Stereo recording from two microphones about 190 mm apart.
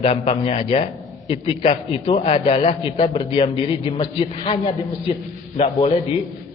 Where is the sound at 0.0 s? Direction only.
30° left (ahead or behind).